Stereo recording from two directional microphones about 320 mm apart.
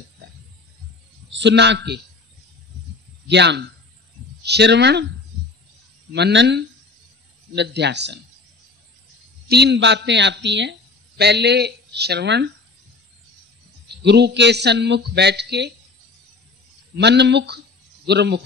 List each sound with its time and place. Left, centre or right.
1.3 s speech: right
3.3 s speech: right
6.1 s speech: right
9.5 s speech: right
14.0 s speech: right
16.9 s speech: right